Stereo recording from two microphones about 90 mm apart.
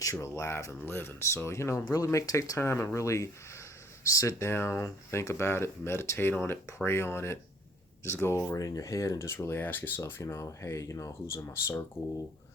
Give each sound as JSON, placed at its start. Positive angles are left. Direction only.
{"t": 0.0, "sound": "speech", "side_deg": 35}
{"t": 8.5, "sound": "speech", "side_deg": 40}